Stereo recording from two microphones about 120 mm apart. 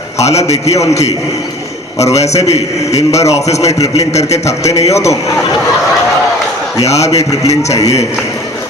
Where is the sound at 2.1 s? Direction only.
65° left (ahead or behind).